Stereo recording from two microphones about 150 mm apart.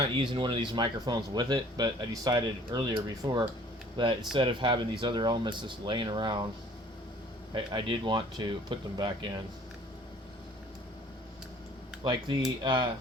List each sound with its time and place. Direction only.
0.1 s speech: 35° right (ahead or behind)
7.5 s speech: 35° right (ahead or behind)
12.6 s speech: 30° right (ahead or behind)